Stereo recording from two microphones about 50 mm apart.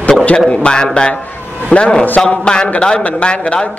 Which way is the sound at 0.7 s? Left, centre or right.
Centre.